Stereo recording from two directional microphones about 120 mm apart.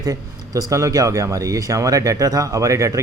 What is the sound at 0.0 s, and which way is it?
Speech, 30° right (ahead or behind).